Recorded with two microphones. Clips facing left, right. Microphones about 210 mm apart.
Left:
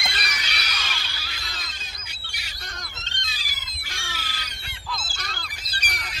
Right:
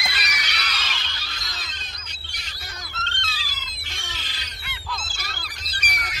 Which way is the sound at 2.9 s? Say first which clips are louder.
Right 6 dB; 15° left (ahead or behind).